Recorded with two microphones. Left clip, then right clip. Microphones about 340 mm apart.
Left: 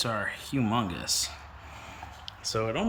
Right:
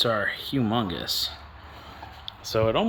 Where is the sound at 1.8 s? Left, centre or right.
Centre.